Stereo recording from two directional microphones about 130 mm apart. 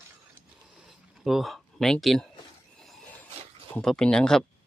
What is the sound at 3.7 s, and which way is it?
Speech, 5° left (ahead or behind).